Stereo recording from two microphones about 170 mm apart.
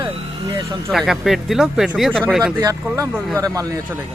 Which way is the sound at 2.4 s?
20° right (ahead or behind).